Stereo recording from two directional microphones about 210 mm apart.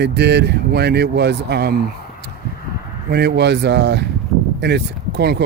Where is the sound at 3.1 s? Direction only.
55° right (ahead or behind).